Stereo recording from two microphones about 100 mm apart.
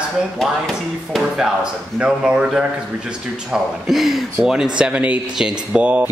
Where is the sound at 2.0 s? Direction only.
10° right (ahead or behind).